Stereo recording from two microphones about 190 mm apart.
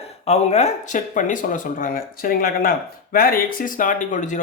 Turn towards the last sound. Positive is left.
turn(degrees=40)  # may be behind; listen again after turning